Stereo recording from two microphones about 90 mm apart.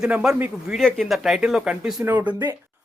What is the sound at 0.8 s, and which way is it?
Speech, 5° left (ahead or behind).